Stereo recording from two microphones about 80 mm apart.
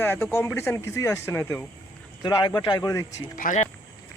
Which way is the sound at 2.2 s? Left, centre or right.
Left.